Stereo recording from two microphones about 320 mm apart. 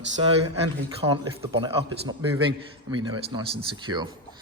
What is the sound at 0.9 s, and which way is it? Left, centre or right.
Speech, centre.